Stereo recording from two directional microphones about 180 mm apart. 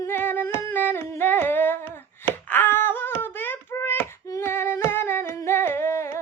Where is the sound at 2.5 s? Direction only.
10° left (ahead or behind).